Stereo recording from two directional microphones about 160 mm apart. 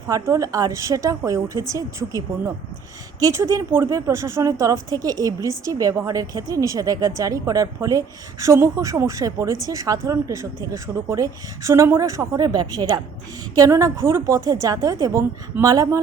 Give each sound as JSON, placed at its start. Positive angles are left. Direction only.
{"t": 0.1, "sound": "speech", "side_deg": -20}